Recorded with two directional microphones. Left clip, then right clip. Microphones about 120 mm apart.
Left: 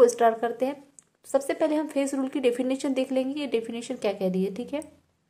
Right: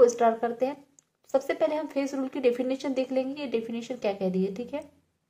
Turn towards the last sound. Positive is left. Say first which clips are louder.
# left 1 dB
turn(degrees=40)  # may be behind; listen again after turning